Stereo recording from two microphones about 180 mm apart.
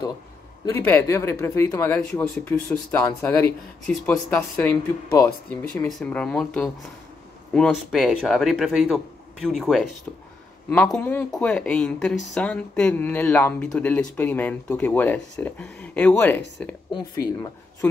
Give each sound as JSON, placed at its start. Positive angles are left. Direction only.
{"t": 0.7, "sound": "speech", "side_deg": 10}
{"t": 2.9, "sound": "speech", "side_deg": 15}
{"t": 16.9, "sound": "speech", "side_deg": 20}